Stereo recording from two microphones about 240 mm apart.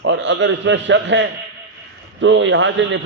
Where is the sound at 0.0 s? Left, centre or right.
Right.